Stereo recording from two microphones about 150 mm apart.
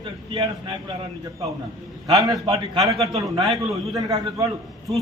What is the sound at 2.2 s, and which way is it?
Speech, centre (ahead or behind).